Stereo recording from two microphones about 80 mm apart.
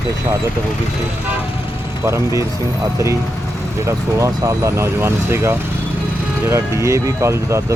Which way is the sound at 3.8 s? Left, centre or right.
Right.